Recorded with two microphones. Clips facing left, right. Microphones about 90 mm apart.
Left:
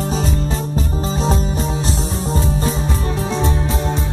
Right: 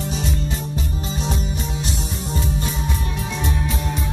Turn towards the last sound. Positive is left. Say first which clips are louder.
# left 5 dB
turn(degrees=30)  # may be behind; listen again after turning